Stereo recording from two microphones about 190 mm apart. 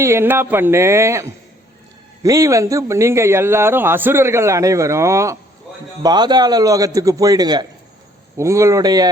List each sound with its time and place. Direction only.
0.0 s a man's voice: 15° right (ahead or behind)